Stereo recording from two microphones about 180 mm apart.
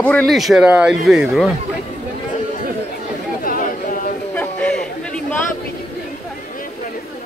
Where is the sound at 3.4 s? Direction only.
50° left (ahead or behind).